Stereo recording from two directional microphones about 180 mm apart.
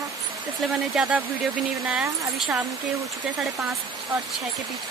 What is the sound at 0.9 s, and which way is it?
Speech, 5° right (ahead or behind).